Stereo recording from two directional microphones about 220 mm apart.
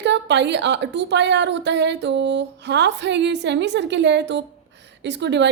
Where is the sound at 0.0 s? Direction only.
50° right (ahead or behind).